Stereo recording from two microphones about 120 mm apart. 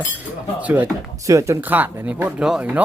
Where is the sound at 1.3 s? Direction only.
25° right (ahead or behind).